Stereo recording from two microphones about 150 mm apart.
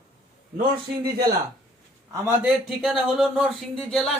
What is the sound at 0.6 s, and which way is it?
Speech, 30° right (ahead or behind).